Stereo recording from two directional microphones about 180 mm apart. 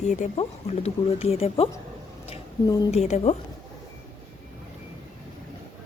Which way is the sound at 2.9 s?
40° left (ahead or behind).